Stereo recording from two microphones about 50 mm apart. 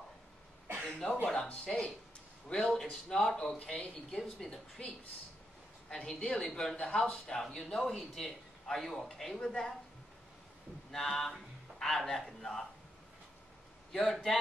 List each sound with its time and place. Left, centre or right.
0.8 s a man's voice: left
3.8 s speech: left
4.2 s a man's voice: centre
5.9 s a man's voice: centre
9.4 s a man's voice: centre
10.9 s a man's voice: centre
13.9 s a man's voice: centre